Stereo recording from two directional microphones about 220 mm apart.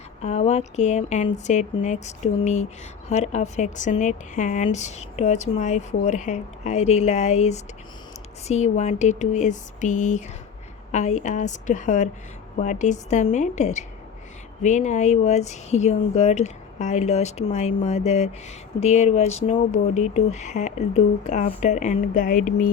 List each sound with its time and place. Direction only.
0.2 s a woman's voice: 30° left (ahead or behind)